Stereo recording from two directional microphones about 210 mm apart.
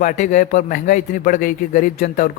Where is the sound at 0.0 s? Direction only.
40° left (ahead or behind).